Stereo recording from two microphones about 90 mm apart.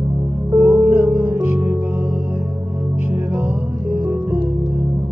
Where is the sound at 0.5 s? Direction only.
20° right (ahead or behind).